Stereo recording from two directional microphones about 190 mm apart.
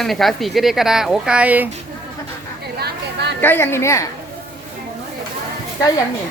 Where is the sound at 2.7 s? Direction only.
60° right (ahead or behind).